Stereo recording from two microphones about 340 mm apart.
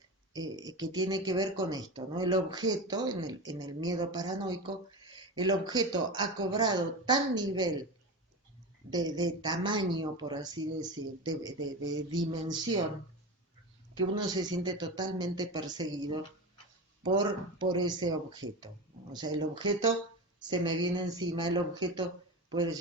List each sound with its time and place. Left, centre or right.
0.3 s speech: centre
8.9 s speech: centre
11.8 s mantra: right
14.3 s speech: centre